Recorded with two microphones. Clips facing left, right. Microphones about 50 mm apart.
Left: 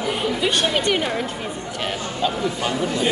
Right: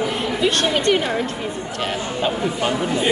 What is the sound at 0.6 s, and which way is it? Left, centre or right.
Speech, centre.